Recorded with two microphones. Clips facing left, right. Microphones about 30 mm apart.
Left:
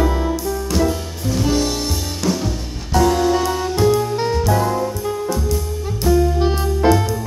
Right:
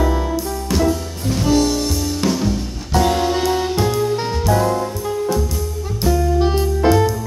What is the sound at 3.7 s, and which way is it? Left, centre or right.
Music, centre.